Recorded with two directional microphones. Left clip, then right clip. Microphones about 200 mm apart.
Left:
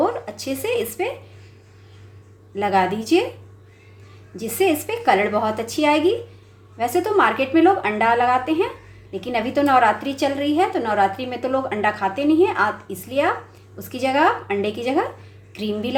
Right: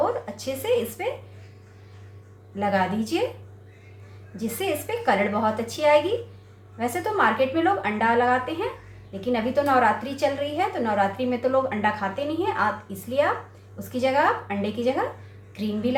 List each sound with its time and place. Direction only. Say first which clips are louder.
0.0 s speech: left 3 dB; 40° left (ahead or behind)
2.6 s a woman's voice: left 5 dB; 40° left (ahead or behind)
4.4 s a woman's voice: left 7 dB; 40° left (ahead or behind)